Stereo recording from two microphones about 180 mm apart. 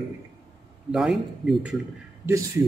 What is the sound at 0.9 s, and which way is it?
Speech, centre (ahead or behind).